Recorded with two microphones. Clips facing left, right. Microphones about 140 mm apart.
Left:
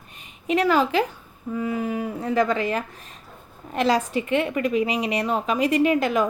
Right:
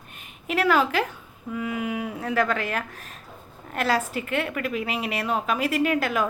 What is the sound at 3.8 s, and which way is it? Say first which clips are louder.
A woman's voice: left 4 dB; 5° right (ahead or behind).